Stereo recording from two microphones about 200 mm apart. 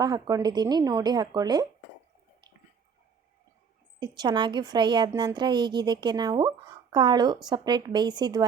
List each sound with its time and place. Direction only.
0.0 s a woman's voice: 20° right (ahead or behind)
4.0 s a woman's voice: 20° right (ahead or behind)